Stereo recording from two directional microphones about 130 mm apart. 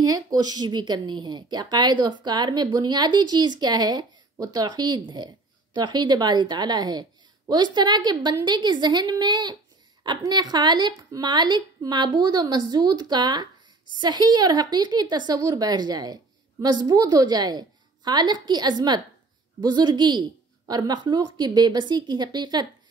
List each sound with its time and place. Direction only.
0.0 s speech: 30° right (ahead or behind)